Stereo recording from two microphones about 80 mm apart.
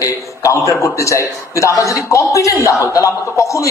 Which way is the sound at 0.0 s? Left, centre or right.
Left.